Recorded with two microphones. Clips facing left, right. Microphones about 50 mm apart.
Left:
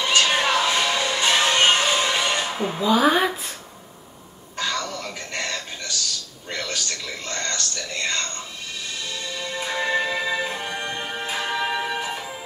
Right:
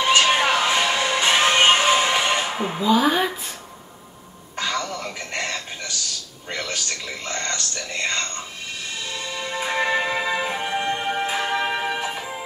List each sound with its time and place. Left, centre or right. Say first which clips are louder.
0.0 s music: right 3 dB; right
2.6 s speech: even; centre
3.0 s speech: left 4 dB; centre
4.6 s music: right 1 dB; right
6.5 s a man's voice: right 1 dB; right
9.1 s music: right 2 dB; right